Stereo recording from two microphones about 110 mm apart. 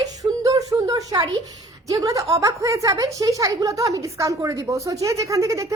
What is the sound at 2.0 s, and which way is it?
A woman's voice, 30° right (ahead or behind).